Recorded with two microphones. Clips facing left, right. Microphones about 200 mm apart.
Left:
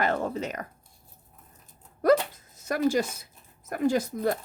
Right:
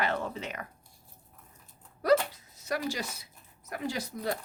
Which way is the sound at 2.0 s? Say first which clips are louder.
Left 3 dB; 50° left (ahead or behind).